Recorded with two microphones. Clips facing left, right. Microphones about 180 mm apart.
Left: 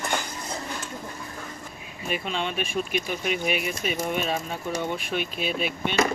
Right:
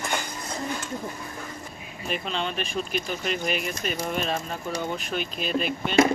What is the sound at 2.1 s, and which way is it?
Speech, 5° left (ahead or behind).